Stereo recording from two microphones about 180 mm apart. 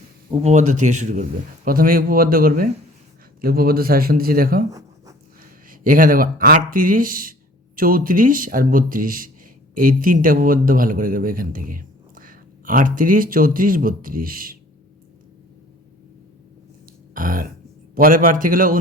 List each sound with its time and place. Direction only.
0.4 s speech: 40° right (ahead or behind)
17.2 s speech: 50° right (ahead or behind)